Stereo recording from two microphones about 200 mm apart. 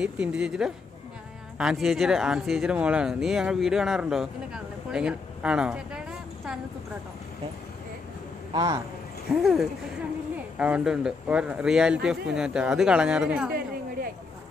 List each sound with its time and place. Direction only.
0.0 s speech: 5° right (ahead or behind)
4.9 s a sound: 5° right (ahead or behind)
8.5 s a man's voice: 20° right (ahead or behind)
9.3 s speech: centre (ahead or behind)